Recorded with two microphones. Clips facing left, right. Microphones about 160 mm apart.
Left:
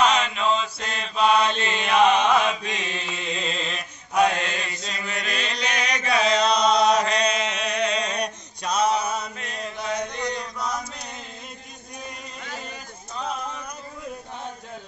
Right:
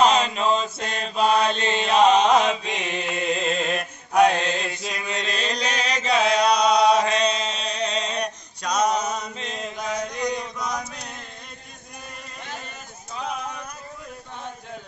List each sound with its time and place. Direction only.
0.0 s mantra: 35° right (ahead or behind)
2.7 s mantra: 60° right (ahead or behind)
4.8 s mantra: 20° right (ahead or behind)
6.3 s chant: 10° right (ahead or behind)
7.0 s chant: 25° right (ahead or behind)
8.7 s mantra: 40° right (ahead or behind)
9.0 s chant: 20° right (ahead or behind)
9.9 s mantra: 15° right (ahead or behind)